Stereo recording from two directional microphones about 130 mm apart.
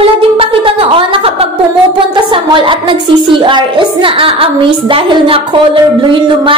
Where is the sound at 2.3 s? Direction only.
40° right (ahead or behind).